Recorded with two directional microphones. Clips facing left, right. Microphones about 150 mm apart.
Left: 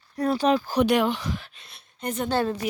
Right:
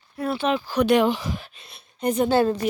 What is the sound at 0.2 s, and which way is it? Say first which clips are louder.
Speech: left 2 dB; 40° left (ahead or behind).